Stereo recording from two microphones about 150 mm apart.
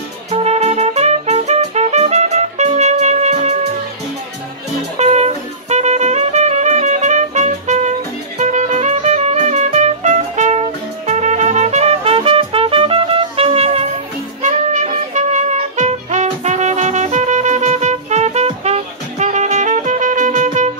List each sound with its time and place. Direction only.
0.3 s music: 45° right (ahead or behind)
4.9 s music: 45° right (ahead or behind)